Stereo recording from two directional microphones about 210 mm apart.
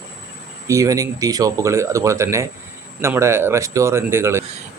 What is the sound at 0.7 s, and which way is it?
Speech, 15° right (ahead or behind).